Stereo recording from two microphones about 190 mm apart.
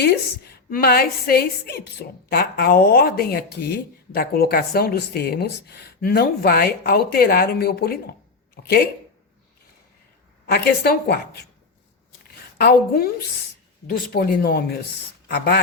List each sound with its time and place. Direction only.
0.0 s a woman's voice: 55° left (ahead or behind)
10.4 s a woman's voice: 55° left (ahead or behind)
12.5 s a woman's voice: 55° left (ahead or behind)